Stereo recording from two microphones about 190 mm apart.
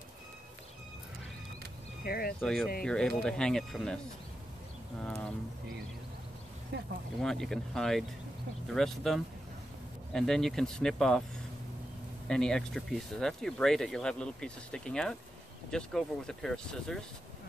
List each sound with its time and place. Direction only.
2.0 s speech: 55° left (ahead or behind)
2.4 s speech: centre (ahead or behind)
6.7 s speech: 60° right (ahead or behind)
7.2 s speech: centre (ahead or behind)
12.3 s speech: 5° left (ahead or behind)